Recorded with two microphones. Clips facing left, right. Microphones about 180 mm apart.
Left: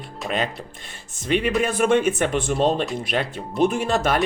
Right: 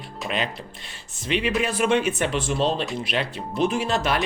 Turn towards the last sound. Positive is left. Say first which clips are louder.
# left 2 dB
turn(degrees=45)  # may be behind; listen again after turning